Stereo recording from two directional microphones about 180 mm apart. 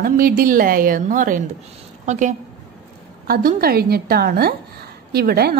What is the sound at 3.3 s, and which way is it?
A woman's voice, 55° right (ahead or behind).